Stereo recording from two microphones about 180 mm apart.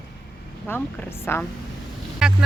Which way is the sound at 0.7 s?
10° left (ahead or behind).